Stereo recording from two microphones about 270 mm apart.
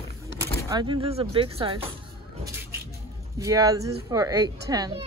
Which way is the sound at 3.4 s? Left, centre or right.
Centre.